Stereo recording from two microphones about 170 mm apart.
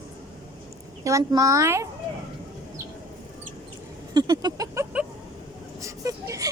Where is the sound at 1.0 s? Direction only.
20° right (ahead or behind).